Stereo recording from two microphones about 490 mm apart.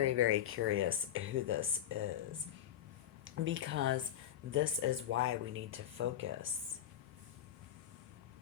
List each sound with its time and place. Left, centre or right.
0.0 s speech: right
3.4 s speech: right